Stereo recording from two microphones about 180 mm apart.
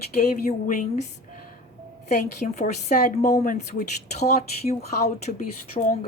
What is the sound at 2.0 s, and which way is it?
Speech, 40° left (ahead or behind).